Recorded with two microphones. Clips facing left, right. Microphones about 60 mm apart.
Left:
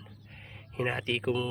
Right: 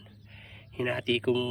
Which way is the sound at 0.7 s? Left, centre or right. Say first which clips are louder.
Right 2 dB; left.